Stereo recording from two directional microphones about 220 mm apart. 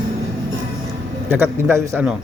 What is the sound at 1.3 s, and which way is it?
Speech, 10° right (ahead or behind).